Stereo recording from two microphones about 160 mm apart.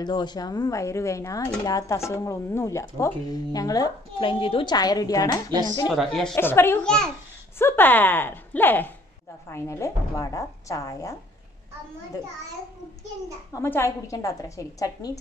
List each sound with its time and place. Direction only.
0.0 s speech: 25° left (ahead or behind)
5.9 s a woman's voice: centre (ahead or behind)
6.3 s speech: 15° left (ahead or behind)
13.5 s speech: 15° left (ahead or behind)